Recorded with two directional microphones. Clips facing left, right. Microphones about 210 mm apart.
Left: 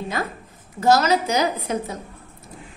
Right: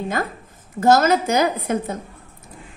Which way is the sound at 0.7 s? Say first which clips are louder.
Right 2 dB; 50° right (ahead or behind).